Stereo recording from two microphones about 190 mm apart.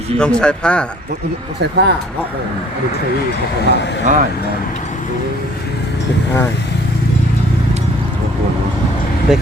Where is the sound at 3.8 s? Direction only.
65° left (ahead or behind).